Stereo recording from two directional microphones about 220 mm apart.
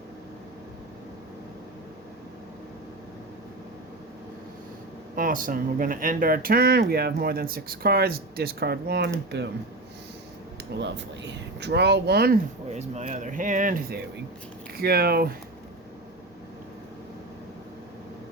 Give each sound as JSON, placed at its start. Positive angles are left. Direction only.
{"t": 5.1, "sound": "speech", "side_deg": -40}
{"t": 10.8, "sound": "speech", "side_deg": -50}
{"t": 12.7, "sound": "speech", "side_deg": -30}